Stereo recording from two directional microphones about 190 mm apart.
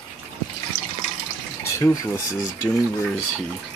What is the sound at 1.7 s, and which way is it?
Speech, 15° left (ahead or behind).